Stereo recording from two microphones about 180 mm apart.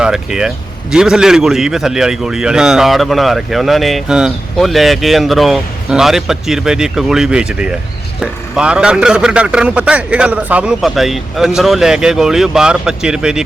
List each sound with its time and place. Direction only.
0.0 s a man's voice: 5° right (ahead or behind)